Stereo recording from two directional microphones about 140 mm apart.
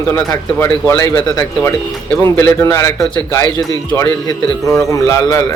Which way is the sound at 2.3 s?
15° left (ahead or behind).